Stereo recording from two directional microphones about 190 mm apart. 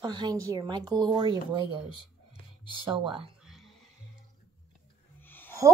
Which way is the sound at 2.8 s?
25° right (ahead or behind).